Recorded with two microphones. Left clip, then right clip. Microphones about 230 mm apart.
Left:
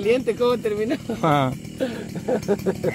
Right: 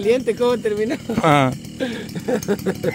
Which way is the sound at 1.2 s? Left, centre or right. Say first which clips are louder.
Right 5 dB; right.